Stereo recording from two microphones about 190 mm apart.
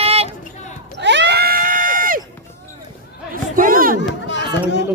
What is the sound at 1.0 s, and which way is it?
Screaming, 65° right (ahead or behind).